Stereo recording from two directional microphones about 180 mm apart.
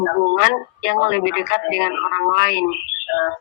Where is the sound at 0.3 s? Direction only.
70° left (ahead or behind).